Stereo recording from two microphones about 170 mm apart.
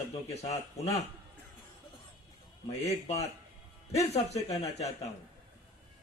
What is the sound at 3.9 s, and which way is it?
Speech, 40° left (ahead or behind).